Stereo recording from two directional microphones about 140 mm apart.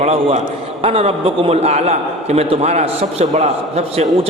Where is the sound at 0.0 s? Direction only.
50° right (ahead or behind).